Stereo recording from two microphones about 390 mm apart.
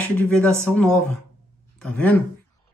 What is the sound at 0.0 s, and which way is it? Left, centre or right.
Speech, centre.